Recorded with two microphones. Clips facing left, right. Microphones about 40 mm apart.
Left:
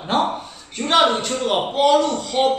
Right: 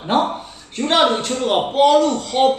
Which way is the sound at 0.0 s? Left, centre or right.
Centre.